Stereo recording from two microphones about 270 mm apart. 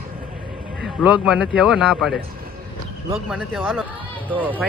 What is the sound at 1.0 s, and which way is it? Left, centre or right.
Speech, centre.